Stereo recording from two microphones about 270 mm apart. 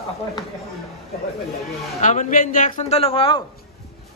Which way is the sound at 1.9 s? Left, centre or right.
Left.